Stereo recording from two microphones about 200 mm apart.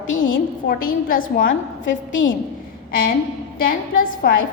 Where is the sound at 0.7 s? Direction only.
45° left (ahead or behind).